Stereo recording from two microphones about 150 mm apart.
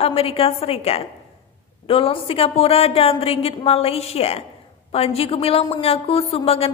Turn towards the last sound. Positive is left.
turn(degrees=40)  # may be behind; listen again after turning